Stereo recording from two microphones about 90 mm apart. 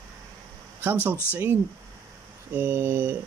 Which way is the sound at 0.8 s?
20° right (ahead or behind).